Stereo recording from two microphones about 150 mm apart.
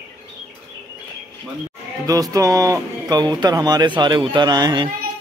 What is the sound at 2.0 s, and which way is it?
Speech, 25° right (ahead or behind).